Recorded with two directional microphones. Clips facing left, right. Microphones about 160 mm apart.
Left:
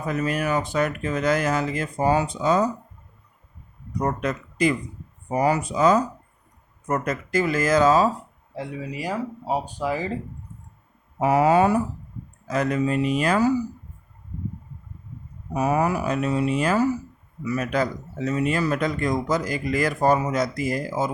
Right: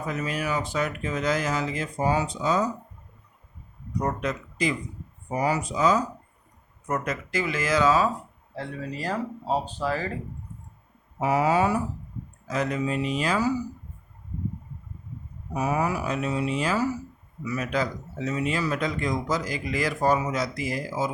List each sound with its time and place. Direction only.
0.1 s speech: 55° left (ahead or behind)
4.2 s speech: 55° left (ahead or behind)
6.8 s speech: 45° left (ahead or behind)
8.5 s speech: 10° left (ahead or behind)
11.2 s speech: 55° left (ahead or behind)
15.5 s speech: 55° left (ahead or behind)